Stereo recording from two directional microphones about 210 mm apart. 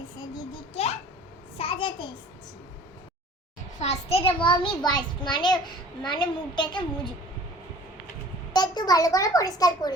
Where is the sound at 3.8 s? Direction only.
30° left (ahead or behind).